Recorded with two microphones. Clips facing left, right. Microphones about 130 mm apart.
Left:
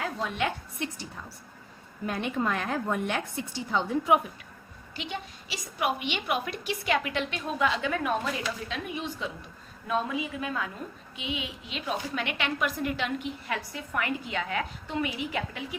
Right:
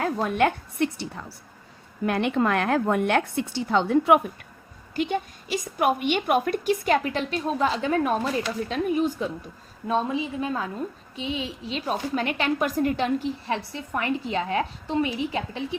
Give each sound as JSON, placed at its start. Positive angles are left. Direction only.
{"t": 0.0, "sound": "a woman's voice", "side_deg": -50}
{"t": 4.9, "sound": "a woman's voice", "side_deg": -50}
{"t": 9.8, "sound": "a woman's voice", "side_deg": -30}